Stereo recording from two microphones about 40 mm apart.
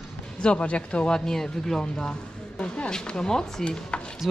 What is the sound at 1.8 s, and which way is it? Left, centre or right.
A woman's voice, left.